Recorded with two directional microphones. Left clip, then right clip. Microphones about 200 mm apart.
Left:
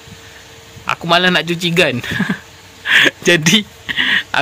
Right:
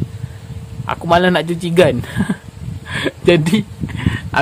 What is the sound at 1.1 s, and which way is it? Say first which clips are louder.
Speech: even; 15° right (ahead or behind).